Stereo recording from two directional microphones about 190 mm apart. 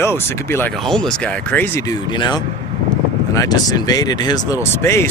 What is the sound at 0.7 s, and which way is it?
Speech, centre (ahead or behind).